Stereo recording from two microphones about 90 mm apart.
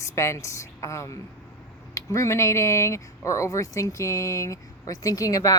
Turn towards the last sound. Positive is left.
turn(degrees=40)  # may be behind; listen again after turning